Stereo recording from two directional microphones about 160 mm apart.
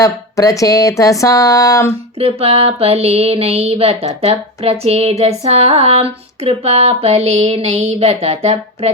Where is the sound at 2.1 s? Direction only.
40° right (ahead or behind).